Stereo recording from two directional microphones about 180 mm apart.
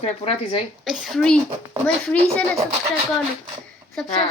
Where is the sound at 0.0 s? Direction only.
30° left (ahead or behind).